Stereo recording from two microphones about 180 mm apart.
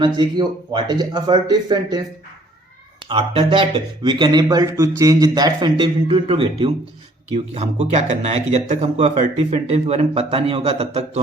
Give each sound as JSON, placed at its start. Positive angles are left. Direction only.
{"t": 0.0, "sound": "speech", "side_deg": -25}
{"t": 3.1, "sound": "speech", "side_deg": -30}